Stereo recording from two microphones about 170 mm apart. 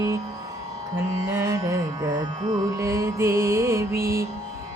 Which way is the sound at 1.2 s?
20° right (ahead or behind).